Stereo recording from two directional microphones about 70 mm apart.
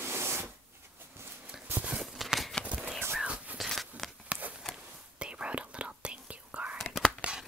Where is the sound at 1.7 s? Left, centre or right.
Right.